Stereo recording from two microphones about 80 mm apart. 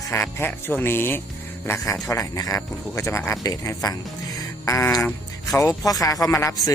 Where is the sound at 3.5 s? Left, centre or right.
Left.